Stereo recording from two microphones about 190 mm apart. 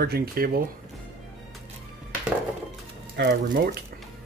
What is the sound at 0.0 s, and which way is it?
Speech, 55° right (ahead or behind).